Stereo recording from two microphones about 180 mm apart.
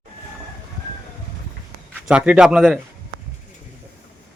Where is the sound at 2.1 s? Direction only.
5° right (ahead or behind).